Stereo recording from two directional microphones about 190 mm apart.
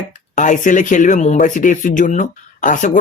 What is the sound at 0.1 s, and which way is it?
Speech, 40° left (ahead or behind).